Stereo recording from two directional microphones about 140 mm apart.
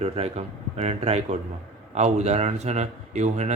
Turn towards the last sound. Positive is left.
turn(degrees=-55)  # may be behind; listen again after turning